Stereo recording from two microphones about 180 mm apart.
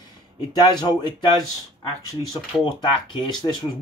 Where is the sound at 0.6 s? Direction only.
25° left (ahead or behind).